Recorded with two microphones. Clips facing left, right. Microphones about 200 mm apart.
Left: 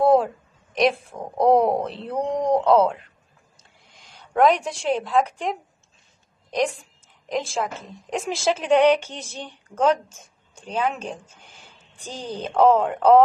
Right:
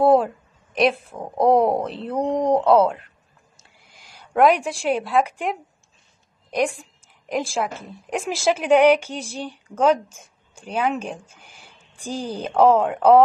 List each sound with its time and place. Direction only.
0.0 s a woman's voice: centre (ahead or behind)